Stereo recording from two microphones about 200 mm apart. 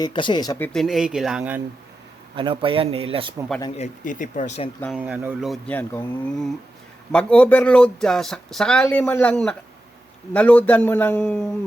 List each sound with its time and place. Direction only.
0.0 s speech: 25° left (ahead or behind)
0.7 s speech: centre (ahead or behind)
2.3 s speech: 25° right (ahead or behind)
3.8 s speech: 40° left (ahead or behind)
4.9 s a man's voice: 5° right (ahead or behind)